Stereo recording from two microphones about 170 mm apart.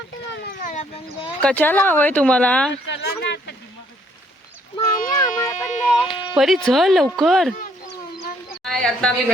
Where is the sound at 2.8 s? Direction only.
90° left.